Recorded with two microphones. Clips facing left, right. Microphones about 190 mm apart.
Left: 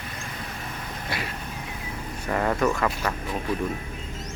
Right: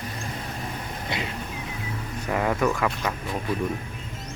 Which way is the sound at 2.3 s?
5° right (ahead or behind).